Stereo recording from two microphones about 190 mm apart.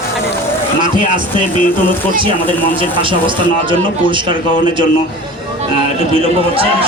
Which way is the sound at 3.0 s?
25° right (ahead or behind).